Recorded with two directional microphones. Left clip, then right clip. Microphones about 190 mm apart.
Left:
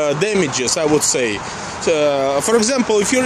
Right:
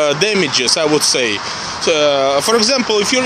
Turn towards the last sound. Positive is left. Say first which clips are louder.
# right 2 dB
turn(degrees=15)  # may be behind; listen again after turning